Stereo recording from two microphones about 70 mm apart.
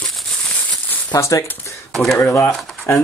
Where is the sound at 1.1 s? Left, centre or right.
Left.